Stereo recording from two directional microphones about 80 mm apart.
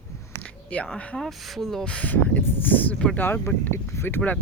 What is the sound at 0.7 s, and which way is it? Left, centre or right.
Speech, centre.